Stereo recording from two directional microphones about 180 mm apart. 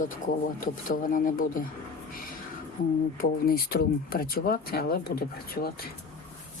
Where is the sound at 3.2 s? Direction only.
55° left (ahead or behind).